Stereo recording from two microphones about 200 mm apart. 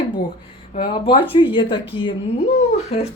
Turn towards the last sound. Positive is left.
turn(degrees=30)  # may be behind; listen again after turning